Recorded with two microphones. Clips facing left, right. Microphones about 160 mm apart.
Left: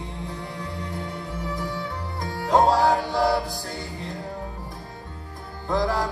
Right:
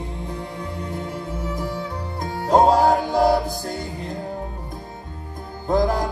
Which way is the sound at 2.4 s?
40° right (ahead or behind).